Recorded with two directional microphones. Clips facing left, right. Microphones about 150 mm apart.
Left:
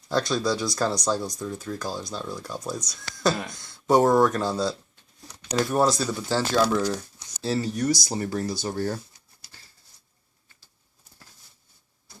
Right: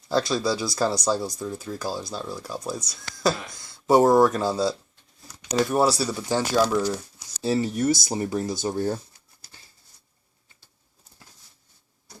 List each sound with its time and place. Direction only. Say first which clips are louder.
0.1 s speech: right 1 dB; 5° right (ahead or behind)